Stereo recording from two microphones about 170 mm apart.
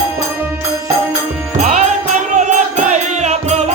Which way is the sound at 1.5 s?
45° right (ahead or behind).